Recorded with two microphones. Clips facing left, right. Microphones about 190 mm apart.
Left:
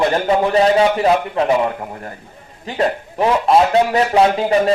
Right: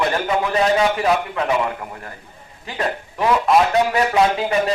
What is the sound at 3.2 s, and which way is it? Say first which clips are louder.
A man's voice: left 2 dB; 30° left (ahead or behind).